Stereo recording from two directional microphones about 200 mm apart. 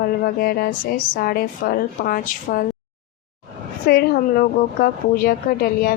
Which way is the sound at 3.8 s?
45° left (ahead or behind).